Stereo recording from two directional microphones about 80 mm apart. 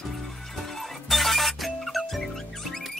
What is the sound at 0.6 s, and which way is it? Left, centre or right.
Music, centre.